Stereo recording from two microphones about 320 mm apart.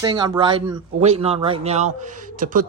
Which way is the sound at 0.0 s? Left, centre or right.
Centre.